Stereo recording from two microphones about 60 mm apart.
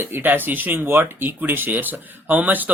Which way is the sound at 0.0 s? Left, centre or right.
Right.